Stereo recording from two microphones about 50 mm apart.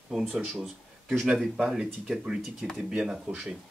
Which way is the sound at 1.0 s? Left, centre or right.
Centre.